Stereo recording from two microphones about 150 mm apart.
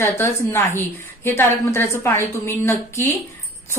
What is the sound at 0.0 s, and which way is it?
A woman's voice, 15° left (ahead or behind).